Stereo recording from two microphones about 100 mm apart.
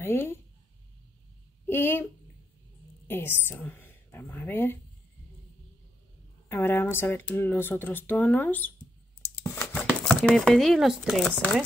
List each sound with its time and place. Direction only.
0.0 s speech: 20° left (ahead or behind)
1.7 s speech: 20° left (ahead or behind)
3.1 s a woman's voice: 20° left (ahead or behind)
6.5 s speech: 20° left (ahead or behind)
9.4 s a sound: 20° left (ahead or behind)
10.0 s speech: 5° left (ahead or behind)